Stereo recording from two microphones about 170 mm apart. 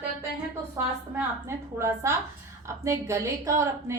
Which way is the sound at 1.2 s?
15° right (ahead or behind).